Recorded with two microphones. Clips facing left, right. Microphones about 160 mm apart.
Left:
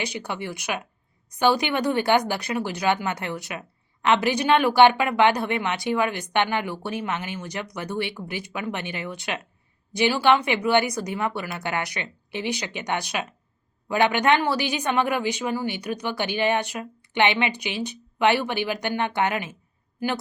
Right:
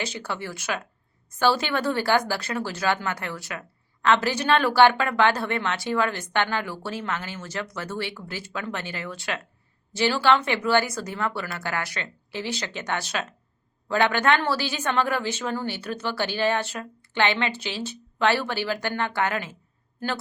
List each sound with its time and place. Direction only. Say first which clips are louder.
0.0 s speech: left 1 dB; 15° left (ahead or behind)